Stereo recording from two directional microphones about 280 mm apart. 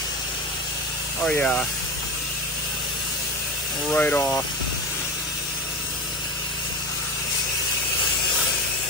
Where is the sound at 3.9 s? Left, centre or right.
Centre.